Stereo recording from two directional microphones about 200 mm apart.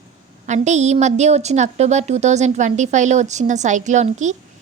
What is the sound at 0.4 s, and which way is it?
A woman's voice, 35° right (ahead or behind).